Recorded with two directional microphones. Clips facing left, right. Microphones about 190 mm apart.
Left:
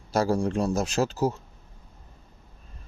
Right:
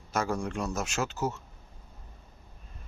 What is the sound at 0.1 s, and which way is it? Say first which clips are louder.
A man's voice: left 7 dB; 35° left (ahead or behind).